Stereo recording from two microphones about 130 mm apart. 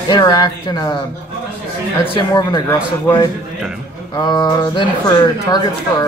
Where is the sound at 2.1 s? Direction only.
35° left (ahead or behind).